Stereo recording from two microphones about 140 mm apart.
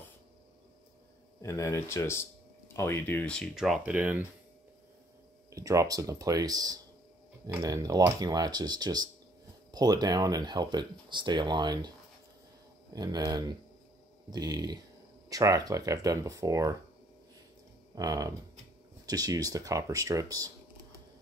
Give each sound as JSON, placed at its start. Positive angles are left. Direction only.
{"t": 1.4, "sound": "speech", "side_deg": 20}
{"t": 3.5, "sound": "speech", "side_deg": -5}
{"t": 5.5, "sound": "speech", "side_deg": -25}
{"t": 12.9, "sound": "speech", "side_deg": -30}
{"t": 17.9, "sound": "speech", "side_deg": -25}